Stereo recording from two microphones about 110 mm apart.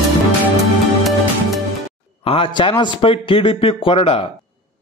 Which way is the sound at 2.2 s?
60° left (ahead or behind).